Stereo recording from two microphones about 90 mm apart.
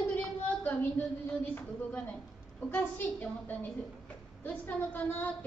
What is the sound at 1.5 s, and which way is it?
A woman's voice, 10° left (ahead or behind).